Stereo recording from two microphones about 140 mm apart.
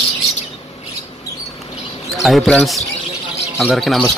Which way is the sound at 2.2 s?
Centre (ahead or behind).